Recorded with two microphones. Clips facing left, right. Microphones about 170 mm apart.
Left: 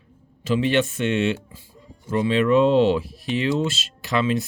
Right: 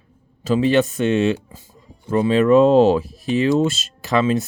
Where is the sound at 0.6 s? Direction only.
35° right (ahead or behind).